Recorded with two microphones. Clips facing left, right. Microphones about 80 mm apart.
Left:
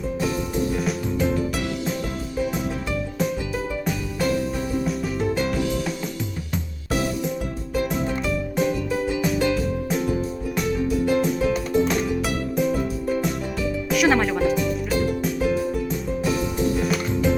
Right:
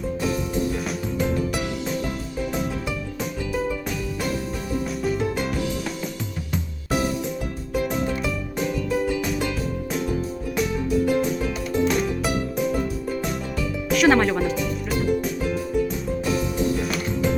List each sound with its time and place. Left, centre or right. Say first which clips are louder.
0.2 s music: left 1 dB; centre
3.8 s music: left 3 dB; centre
7.7 s music: even; centre
13.9 s music: right 2 dB; centre